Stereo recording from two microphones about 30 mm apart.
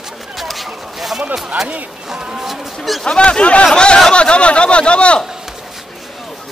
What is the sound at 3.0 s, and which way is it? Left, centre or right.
A man's voice, left.